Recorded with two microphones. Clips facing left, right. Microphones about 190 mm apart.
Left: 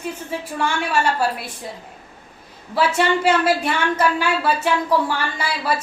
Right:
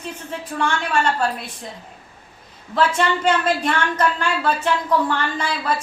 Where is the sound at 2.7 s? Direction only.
10° left (ahead or behind).